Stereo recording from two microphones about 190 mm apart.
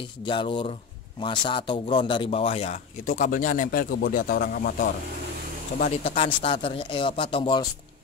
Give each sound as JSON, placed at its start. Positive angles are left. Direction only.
{"t": 0.2, "sound": "a man's voice", "side_deg": 25}
{"t": 5.8, "sound": "speech", "side_deg": 35}